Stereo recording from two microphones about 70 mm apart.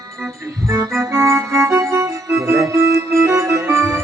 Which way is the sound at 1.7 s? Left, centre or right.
Right.